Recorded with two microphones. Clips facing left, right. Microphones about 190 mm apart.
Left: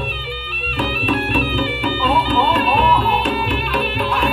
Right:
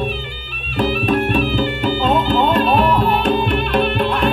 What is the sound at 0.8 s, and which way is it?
Music, 45° right (ahead or behind).